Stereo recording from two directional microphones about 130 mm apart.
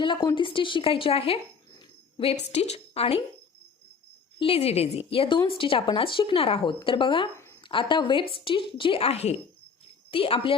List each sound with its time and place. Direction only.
0.0 s a woman's voice: 40° left (ahead or behind)
4.4 s a woman's voice: 45° left (ahead or behind)